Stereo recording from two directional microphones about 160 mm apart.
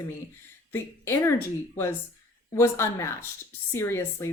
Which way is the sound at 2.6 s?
15° left (ahead or behind).